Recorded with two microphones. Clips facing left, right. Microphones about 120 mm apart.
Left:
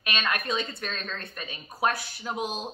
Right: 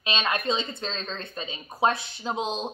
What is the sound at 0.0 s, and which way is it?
Speech, 25° right (ahead or behind).